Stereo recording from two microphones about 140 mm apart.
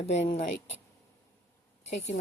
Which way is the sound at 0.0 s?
50° left (ahead or behind).